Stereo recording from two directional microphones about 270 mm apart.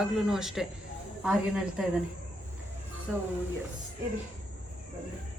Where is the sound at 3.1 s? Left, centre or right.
Centre.